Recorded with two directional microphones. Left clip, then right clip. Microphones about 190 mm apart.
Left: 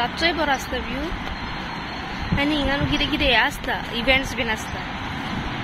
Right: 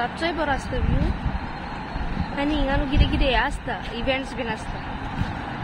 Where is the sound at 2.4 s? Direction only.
10° right (ahead or behind).